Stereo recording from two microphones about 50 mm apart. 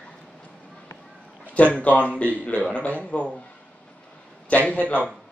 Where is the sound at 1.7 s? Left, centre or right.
Left.